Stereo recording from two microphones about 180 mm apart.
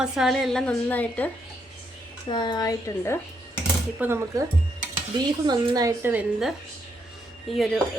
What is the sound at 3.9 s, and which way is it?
A woman's voice, 15° right (ahead or behind).